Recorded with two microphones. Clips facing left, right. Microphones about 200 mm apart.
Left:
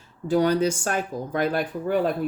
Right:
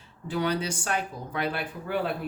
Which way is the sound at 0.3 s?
40° left (ahead or behind).